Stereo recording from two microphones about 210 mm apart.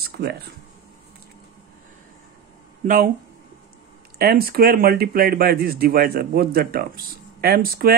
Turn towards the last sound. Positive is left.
turn(degrees=-45)  # may be behind; listen again after turning